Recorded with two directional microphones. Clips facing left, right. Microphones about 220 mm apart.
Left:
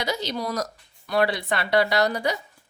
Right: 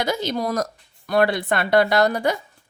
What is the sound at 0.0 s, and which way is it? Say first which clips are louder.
A woman's voice: right 4 dB; 50° right (ahead or behind).